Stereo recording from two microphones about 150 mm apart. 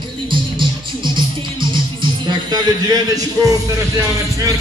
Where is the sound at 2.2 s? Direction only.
25° right (ahead or behind).